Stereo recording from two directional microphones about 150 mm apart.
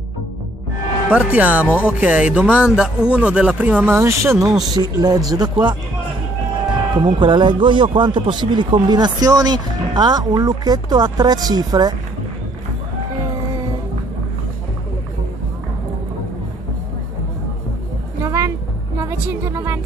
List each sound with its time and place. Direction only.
1.1 s a man's voice: 10° right (ahead or behind); by 5.8 s 30° right (ahead or behind)
7.0 s a man's voice: 30° right (ahead or behind)
18.2 s a sound: 20° right (ahead or behind)
18.9 s music: 15° right (ahead or behind)